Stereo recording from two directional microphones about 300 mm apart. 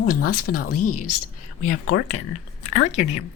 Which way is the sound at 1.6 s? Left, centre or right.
Left.